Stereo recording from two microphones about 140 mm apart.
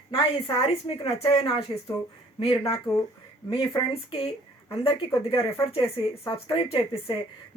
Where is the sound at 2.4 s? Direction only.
45° left (ahead or behind).